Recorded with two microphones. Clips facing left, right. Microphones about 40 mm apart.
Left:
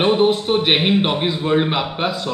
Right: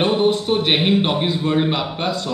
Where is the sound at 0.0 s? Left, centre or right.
Centre.